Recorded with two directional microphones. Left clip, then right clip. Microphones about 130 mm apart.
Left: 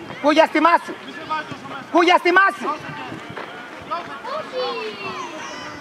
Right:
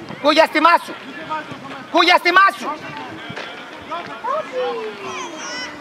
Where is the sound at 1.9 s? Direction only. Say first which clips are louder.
Right 2 dB; 25° right (ahead or behind).